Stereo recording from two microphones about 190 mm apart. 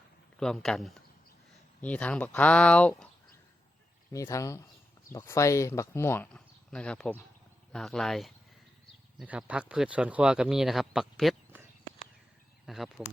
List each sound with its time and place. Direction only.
0.3 s speech: centre (ahead or behind)
4.1 s speech: 15° left (ahead or behind); by 11.3 s centre (ahead or behind)
12.6 s speech: centre (ahead or behind)